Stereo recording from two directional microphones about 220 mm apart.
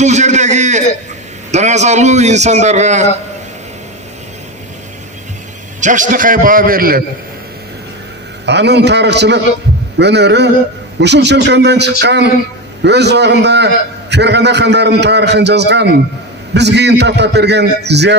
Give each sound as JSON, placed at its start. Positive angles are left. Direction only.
{"t": 0.0, "sound": "a man's voice", "side_deg": -30}
{"t": 5.8, "sound": "a man's voice", "side_deg": -35}
{"t": 8.5, "sound": "a man's voice", "side_deg": -50}